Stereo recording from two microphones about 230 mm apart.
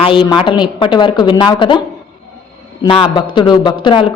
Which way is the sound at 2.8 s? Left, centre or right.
Left.